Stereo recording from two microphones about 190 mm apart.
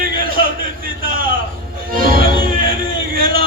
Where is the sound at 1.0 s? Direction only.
45° right (ahead or behind).